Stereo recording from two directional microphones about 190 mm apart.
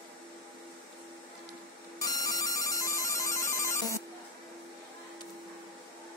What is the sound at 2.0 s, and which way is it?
Music, 20° left (ahead or behind).